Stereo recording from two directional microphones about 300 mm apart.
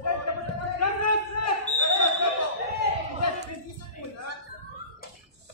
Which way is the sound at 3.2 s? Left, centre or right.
Left.